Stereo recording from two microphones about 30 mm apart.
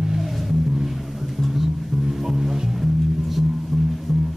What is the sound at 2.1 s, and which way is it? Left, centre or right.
Music, centre.